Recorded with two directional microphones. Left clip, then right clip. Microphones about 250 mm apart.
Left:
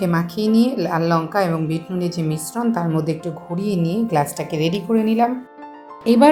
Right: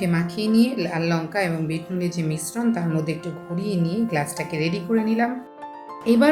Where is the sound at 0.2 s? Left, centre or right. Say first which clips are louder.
Left 3 dB; centre.